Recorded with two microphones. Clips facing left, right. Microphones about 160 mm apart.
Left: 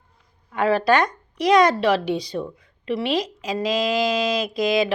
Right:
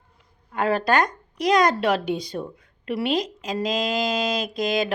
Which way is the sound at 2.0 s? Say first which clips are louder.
Left 2 dB; 50° right (ahead or behind).